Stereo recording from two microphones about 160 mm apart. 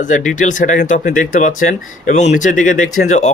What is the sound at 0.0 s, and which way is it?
Speech, 50° left (ahead or behind).